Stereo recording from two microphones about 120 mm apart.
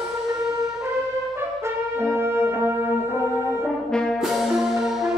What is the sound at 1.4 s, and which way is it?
Brass instrument, 20° right (ahead or behind).